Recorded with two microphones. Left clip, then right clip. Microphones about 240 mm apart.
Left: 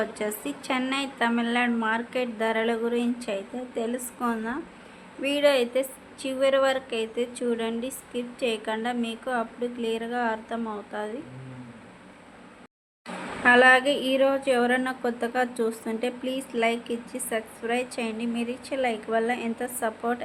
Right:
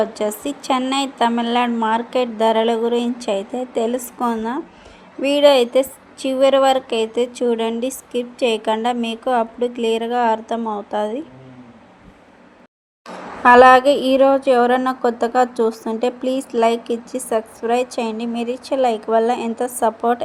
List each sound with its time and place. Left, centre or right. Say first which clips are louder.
0.0 s a woman's voice: right 9 dB; centre
13.4 s a woman's voice: right 9 dB; right
15.7 s speech: right 7 dB; centre
16.0 s a woman's voice: right 9 dB; right